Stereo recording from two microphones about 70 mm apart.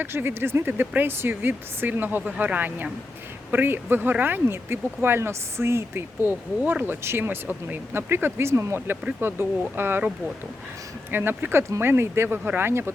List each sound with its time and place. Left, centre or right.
0.0 s speech: right
11.1 s speech: right